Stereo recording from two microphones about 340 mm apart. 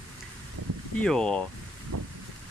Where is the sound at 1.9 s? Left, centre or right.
Right.